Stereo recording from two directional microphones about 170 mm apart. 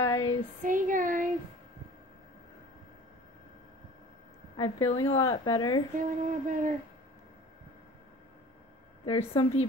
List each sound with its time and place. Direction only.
0.0 s female singing: 20° left (ahead or behind)
0.7 s a sound: 50° right (ahead or behind)
4.6 s a woman's voice: 35° left (ahead or behind)
5.9 s female singing: 50° right (ahead or behind)
9.0 s a woman's voice: 35° left (ahead or behind)